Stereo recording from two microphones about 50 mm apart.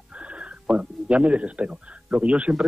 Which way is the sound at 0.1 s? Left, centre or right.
Right.